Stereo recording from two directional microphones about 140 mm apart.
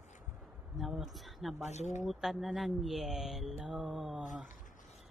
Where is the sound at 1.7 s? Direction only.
55° left (ahead or behind).